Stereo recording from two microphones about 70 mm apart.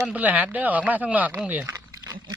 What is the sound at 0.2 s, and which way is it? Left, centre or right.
Speech, right.